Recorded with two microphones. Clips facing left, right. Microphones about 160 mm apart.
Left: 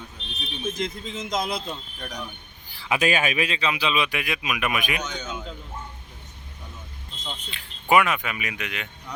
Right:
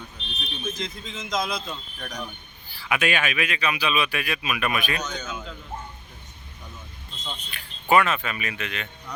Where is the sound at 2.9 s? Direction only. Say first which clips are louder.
Left 2 dB; 35° left (ahead or behind); by 5.0 s 15° left (ahead or behind).